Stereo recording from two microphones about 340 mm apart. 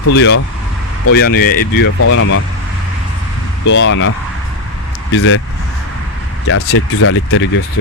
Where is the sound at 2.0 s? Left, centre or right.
Left.